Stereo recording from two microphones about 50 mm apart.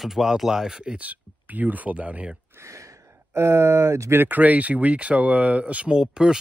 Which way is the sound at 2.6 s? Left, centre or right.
Right.